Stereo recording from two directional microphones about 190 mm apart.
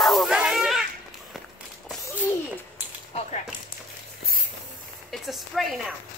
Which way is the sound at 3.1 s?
35° left (ahead or behind).